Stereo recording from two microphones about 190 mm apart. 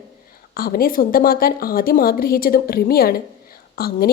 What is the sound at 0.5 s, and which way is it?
A woman's voice, 50° left (ahead or behind).